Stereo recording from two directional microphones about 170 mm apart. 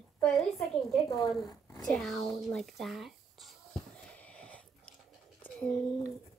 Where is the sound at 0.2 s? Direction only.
Centre (ahead or behind).